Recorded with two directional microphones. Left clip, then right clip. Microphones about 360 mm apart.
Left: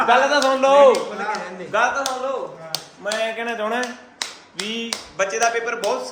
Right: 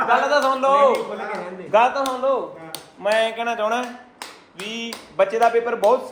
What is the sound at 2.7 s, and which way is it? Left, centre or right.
A man's voice, centre.